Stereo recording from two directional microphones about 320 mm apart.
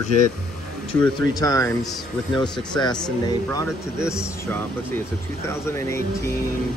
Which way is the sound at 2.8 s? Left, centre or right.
Centre.